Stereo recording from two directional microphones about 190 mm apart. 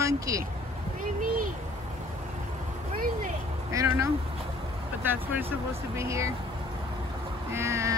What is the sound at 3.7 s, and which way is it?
Speech, 15° right (ahead or behind).